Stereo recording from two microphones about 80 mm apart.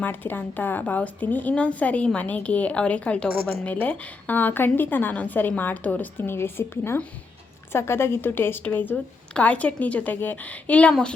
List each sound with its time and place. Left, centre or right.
0.0 s a woman's voice: left